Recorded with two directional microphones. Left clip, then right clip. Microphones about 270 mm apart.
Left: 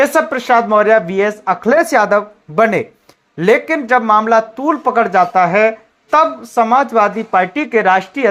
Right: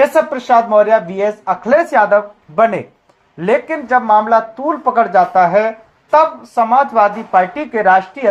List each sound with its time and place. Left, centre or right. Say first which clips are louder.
0.0 s speech: right 1 dB; left